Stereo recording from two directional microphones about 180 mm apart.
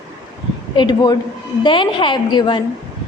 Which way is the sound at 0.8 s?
25° left (ahead or behind).